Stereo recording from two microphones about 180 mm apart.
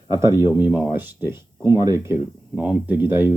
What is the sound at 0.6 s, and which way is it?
Speech, 10° right (ahead or behind).